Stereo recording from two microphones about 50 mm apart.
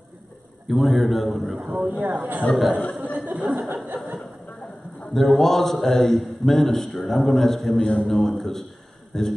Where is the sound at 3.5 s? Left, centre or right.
Right.